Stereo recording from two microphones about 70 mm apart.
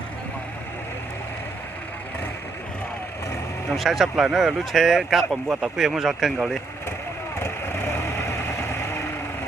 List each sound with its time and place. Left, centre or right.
3.8 s speech: centre
7.3 s vehicle: left